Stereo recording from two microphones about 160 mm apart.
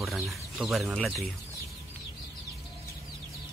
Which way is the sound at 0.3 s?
Centre (ahead or behind).